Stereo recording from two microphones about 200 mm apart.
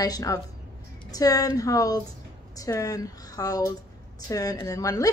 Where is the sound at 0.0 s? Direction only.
20° left (ahead or behind).